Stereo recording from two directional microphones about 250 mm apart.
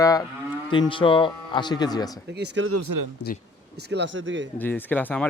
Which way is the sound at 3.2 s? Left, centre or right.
Left.